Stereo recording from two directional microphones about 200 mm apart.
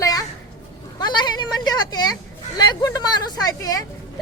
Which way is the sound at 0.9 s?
20° left (ahead or behind).